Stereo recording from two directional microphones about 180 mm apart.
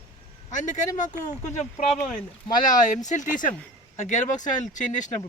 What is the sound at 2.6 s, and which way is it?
Speech, 45° left (ahead or behind).